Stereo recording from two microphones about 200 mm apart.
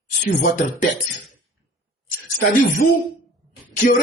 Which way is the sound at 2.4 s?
45° left (ahead or behind).